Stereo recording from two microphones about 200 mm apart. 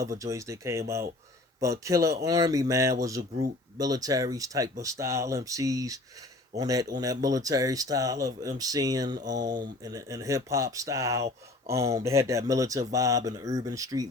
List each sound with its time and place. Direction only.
0.0 s speech: 15° right (ahead or behind)